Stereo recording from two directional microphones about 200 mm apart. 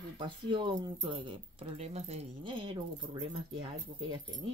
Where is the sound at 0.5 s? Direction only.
25° right (ahead or behind).